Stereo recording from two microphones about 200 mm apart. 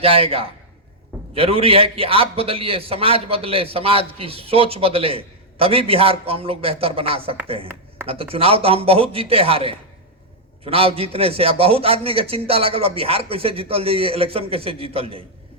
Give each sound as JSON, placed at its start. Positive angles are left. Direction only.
{"t": 0.0, "sound": "a man's voice", "side_deg": -30}